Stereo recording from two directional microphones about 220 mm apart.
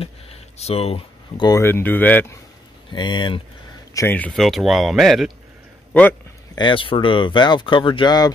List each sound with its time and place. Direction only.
0.6 s speech: 30° left (ahead or behind); by 2.3 s 10° left (ahead or behind)
2.9 s speech: 20° left (ahead or behind)
3.9 s speech: 10° left (ahead or behind)
6.5 s speech: 20° left (ahead or behind)